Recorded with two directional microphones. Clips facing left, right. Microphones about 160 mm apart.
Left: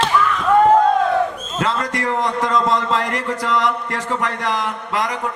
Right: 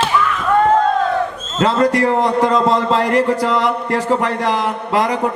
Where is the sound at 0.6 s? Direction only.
10° left (ahead or behind).